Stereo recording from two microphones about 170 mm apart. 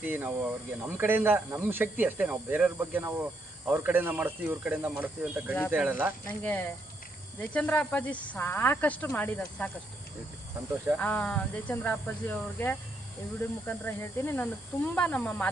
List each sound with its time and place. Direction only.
0.0 s speech: 10° right (ahead or behind)
6.2 s speech: 10° left (ahead or behind)
10.9 s speech: 10° left (ahead or behind)